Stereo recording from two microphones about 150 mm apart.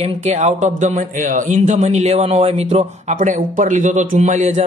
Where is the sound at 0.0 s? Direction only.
50° right (ahead or behind).